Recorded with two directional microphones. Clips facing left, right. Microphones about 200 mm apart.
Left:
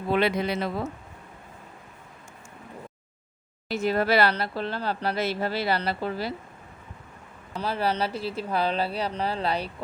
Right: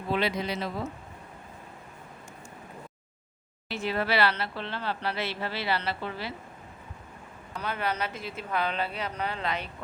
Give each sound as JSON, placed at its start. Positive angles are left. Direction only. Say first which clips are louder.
{"t": 0.1, "sound": "speech", "louder": "left 4 dB", "side_deg": 55}
{"t": 3.7, "sound": "speech", "louder": "left 5 dB", "side_deg": 40}
{"t": 7.5, "sound": "speech", "louder": "left 5 dB", "side_deg": 30}